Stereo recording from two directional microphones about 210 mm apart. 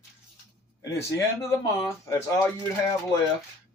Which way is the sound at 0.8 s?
15° left (ahead or behind).